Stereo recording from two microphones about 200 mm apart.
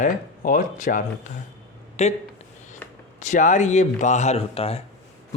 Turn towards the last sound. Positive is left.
turn(degrees=30)  # may be behind; listen again after turning